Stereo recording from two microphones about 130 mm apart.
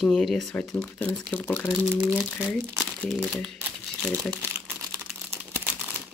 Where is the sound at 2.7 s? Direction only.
5° left (ahead or behind).